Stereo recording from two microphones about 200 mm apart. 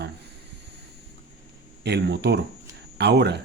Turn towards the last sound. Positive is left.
turn(degrees=-55)  # may be behind; listen again after turning